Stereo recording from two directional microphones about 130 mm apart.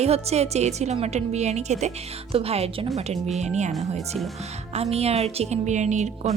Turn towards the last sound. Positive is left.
turn(degrees=-65)  # may be behind; listen again after turning